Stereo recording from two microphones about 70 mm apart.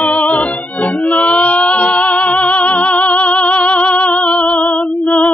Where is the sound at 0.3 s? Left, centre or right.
Centre.